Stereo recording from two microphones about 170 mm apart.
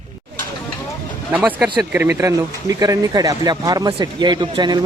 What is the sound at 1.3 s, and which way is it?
Speech, 10° right (ahead or behind).